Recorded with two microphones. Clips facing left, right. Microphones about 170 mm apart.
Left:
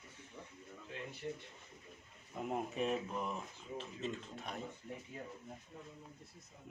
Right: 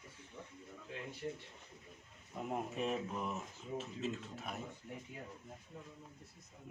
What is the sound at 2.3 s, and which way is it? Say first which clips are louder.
Speech: left 1 dB; centre (ahead or behind).